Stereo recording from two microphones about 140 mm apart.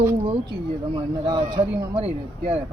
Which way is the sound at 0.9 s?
35° right (ahead or behind).